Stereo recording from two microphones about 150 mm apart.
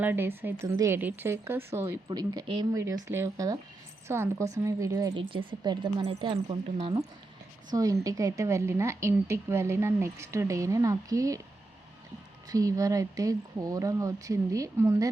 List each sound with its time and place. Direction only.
0.0 s speech: 15° right (ahead or behind)
2.0 s a woman's voice: 25° right (ahead or behind)
2.8 s a woman's voice: 15° right (ahead or behind)
5.1 s speech: 35° right (ahead or behind)
7.7 s a woman's voice: 25° right (ahead or behind)
12.5 s a woman's voice: 20° right (ahead or behind)